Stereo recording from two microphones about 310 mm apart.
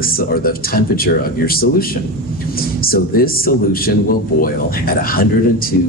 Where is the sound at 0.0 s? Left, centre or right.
Left.